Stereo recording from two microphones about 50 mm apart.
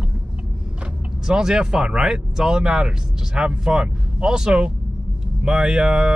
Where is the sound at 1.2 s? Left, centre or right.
Centre.